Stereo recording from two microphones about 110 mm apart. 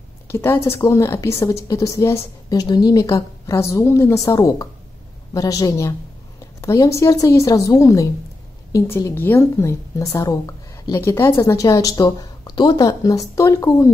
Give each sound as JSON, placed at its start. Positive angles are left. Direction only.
{"t": 0.3, "sound": "a woman's voice", "side_deg": 20}
{"t": 11.0, "sound": "a woman's voice", "side_deg": 25}